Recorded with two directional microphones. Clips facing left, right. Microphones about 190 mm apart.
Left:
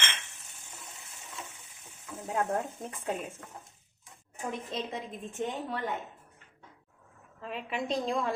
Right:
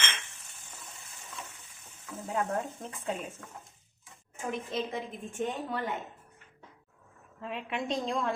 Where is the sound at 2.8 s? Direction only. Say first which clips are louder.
Left 1 dB; 10° left (ahead or behind).